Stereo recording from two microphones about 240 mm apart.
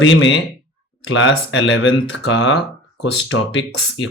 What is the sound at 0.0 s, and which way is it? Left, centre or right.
Speech, left.